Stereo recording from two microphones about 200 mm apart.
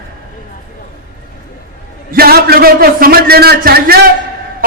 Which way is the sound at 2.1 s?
50° right (ahead or behind).